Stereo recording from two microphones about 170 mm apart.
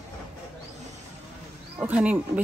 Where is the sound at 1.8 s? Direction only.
10° right (ahead or behind).